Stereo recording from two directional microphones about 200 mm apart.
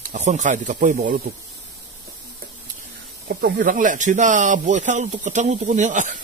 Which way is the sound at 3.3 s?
45° right (ahead or behind).